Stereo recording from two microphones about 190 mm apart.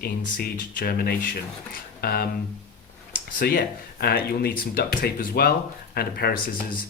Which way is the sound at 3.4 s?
50° left (ahead or behind).